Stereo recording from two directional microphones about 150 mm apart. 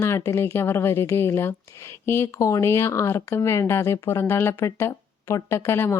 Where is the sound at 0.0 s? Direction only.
20° left (ahead or behind).